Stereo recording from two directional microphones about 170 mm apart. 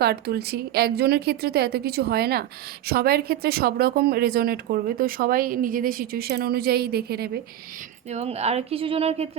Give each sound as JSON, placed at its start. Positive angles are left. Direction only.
{"t": 0.0, "sound": "a woman's voice", "side_deg": -65}
{"t": 8.1, "sound": "speech", "side_deg": -40}